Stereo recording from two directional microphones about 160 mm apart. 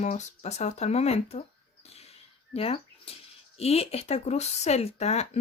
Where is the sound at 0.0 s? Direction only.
45° left (ahead or behind).